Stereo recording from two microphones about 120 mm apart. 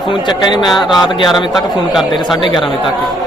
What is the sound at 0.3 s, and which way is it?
A man's voice, 35° left (ahead or behind).